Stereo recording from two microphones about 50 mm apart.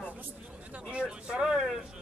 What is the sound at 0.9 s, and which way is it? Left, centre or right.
Speech, centre.